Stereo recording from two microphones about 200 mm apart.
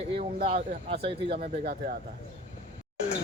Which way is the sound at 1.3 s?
45° right (ahead or behind).